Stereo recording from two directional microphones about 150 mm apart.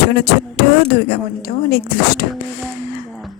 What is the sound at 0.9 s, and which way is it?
Speech, 90° left.